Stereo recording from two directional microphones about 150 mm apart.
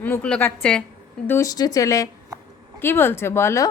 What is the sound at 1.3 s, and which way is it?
Speech, 20° left (ahead or behind).